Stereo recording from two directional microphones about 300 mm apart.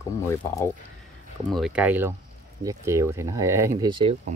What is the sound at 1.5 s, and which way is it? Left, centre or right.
Speech, centre.